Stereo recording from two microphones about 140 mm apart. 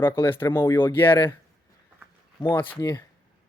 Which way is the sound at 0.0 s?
15° left (ahead or behind).